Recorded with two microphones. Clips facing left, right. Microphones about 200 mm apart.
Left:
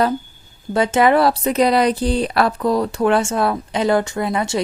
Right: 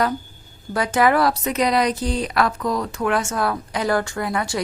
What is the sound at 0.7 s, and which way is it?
Speech, 25° left (ahead or behind).